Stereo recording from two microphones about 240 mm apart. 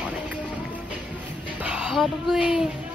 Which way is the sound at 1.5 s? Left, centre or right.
Centre.